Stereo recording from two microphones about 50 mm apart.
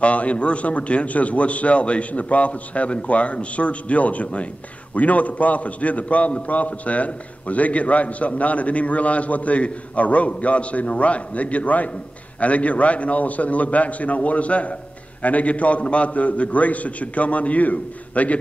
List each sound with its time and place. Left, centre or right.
0.0 s a man's voice: left